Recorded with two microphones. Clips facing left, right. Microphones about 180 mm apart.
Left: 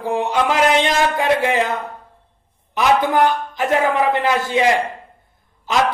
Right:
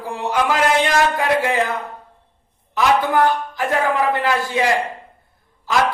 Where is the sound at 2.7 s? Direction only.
20° left (ahead or behind).